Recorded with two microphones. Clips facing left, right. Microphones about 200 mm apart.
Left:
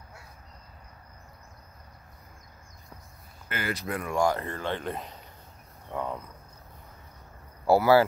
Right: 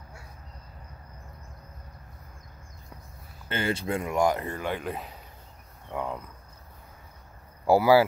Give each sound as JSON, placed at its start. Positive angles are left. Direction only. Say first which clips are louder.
{"t": 3.4, "sound": "speech", "louder": "right 4 dB", "side_deg": -25}
{"t": 5.9, "sound": "cricket", "louder": "even", "side_deg": -10}
{"t": 7.6, "sound": "speech", "louder": "right 1 dB", "side_deg": -15}